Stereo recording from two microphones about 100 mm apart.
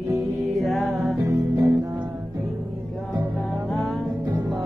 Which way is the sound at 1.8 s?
45° right (ahead or behind).